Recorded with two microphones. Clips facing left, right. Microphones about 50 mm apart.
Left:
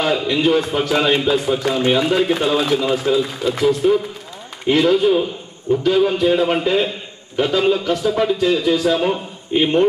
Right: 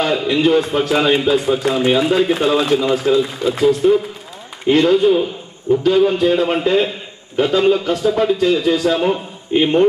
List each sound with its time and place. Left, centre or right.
0.0 s a man's voice: centre